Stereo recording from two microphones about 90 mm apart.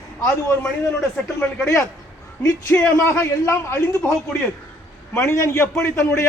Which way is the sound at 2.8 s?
30° left (ahead or behind).